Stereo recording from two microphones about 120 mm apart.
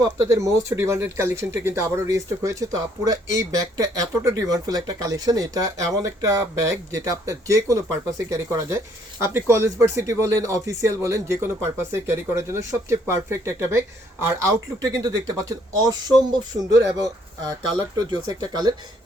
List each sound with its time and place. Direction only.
0.0 s speech: 25° right (ahead or behind)